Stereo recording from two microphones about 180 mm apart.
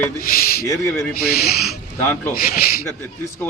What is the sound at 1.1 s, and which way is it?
Speech, 60° left (ahead or behind).